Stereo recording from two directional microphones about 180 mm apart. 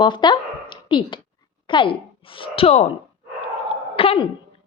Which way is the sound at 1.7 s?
30° left (ahead or behind).